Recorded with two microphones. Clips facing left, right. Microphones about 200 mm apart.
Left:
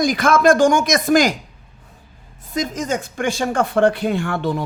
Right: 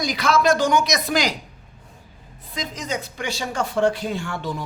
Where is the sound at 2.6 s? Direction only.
45° left (ahead or behind).